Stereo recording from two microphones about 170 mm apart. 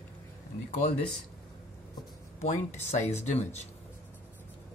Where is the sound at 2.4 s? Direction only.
40° left (ahead or behind).